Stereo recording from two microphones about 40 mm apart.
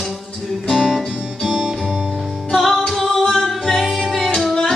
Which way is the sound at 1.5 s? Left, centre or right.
Right.